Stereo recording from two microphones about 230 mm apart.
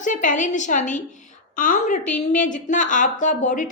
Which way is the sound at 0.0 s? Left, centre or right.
Left.